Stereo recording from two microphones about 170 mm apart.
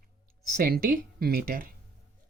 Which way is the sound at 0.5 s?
65° right (ahead or behind).